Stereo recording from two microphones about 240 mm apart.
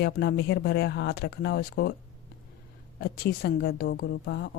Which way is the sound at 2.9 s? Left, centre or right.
Left.